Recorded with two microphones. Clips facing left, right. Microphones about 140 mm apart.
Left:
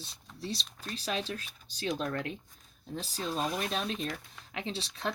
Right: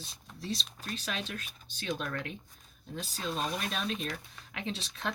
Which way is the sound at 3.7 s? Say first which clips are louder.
Left 1 dB; 30° left (ahead or behind).